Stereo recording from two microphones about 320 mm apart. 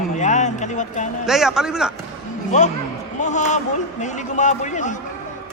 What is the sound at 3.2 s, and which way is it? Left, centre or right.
A man's voice, left.